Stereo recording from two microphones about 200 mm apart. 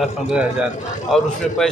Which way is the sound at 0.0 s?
5° right (ahead or behind).